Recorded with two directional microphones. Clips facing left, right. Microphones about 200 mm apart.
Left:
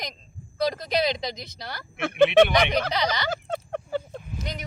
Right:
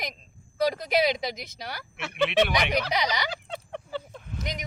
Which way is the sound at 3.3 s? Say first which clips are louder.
Left 7 dB; 45° left (ahead or behind).